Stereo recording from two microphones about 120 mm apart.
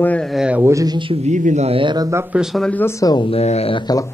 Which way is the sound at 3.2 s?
60° left (ahead or behind).